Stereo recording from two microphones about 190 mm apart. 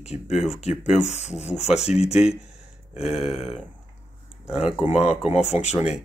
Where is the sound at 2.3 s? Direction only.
35° left (ahead or behind).